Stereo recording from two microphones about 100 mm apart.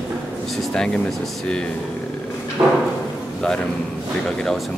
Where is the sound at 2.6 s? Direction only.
10° right (ahead or behind).